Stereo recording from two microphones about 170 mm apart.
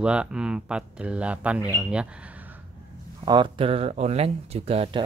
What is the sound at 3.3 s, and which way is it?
Speech, 30° right (ahead or behind).